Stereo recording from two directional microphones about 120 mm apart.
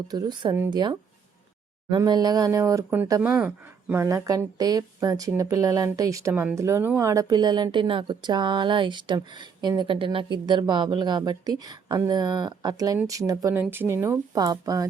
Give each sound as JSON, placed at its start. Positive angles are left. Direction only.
{"t": 0.1, "sound": "speech", "side_deg": -35}
{"t": 2.0, "sound": "speech", "side_deg": -35}
{"t": 3.2, "sound": "speech", "side_deg": -10}
{"t": 4.0, "sound": "speech", "side_deg": -25}
{"t": 13.6, "sound": "speech", "side_deg": -15}